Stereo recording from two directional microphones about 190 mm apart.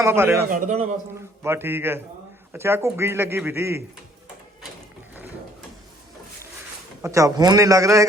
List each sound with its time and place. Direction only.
0.0 s speech: 15° right (ahead or behind)
0.5 s a man's voice: 40° right (ahead or behind)
1.5 s speech: 10° right (ahead or behind)
7.0 s speech: 15° right (ahead or behind)